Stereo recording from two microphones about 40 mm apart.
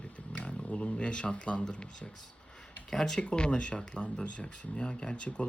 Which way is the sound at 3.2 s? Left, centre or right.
Left.